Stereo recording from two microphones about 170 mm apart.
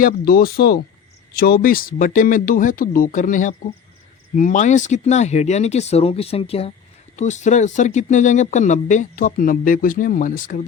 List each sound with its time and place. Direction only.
0.0 s speech: 65° left (ahead or behind)